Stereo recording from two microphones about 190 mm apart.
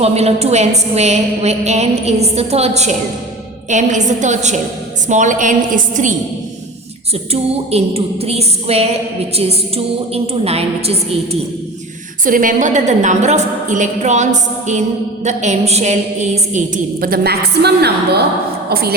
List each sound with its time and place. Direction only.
0.0 s a woman's voice: 35° right (ahead or behind)
7.3 s a woman's voice: 30° right (ahead or behind)
12.2 s a woman's voice: 45° right (ahead or behind)